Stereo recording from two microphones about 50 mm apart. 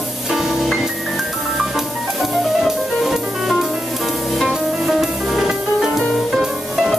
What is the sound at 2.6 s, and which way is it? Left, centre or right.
Music, centre.